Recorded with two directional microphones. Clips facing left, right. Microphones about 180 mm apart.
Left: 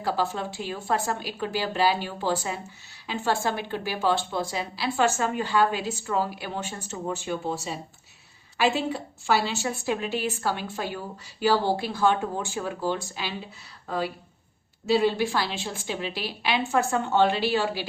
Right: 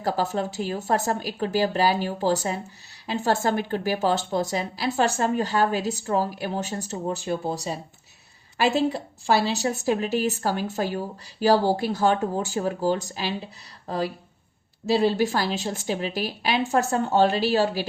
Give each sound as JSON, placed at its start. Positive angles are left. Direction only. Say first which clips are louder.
{"t": 0.0, "sound": "a woman's voice", "louder": "right 2 dB", "side_deg": -45}